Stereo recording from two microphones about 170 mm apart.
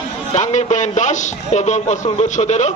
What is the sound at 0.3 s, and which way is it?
Speech, 45° left (ahead or behind).